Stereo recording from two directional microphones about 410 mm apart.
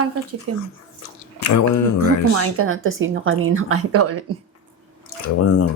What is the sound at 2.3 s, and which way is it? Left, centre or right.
Speech, right.